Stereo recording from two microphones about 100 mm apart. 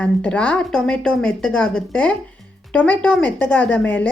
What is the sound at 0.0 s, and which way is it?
A woman's voice, 10° left (ahead or behind).